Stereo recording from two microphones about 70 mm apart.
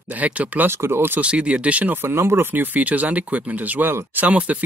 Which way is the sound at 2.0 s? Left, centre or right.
Right.